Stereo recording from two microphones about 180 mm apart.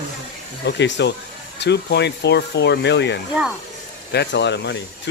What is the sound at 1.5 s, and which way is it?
Speech, 70° left (ahead or behind).